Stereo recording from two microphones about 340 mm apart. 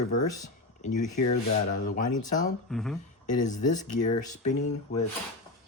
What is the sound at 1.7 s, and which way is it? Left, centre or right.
Speech, left.